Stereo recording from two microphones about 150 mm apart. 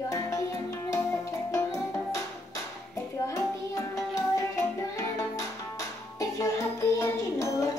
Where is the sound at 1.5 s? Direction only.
20° left (ahead or behind).